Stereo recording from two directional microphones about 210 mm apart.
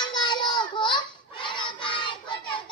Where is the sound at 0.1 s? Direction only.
20° left (ahead or behind).